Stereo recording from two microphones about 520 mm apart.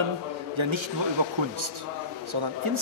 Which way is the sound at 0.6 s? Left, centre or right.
Right.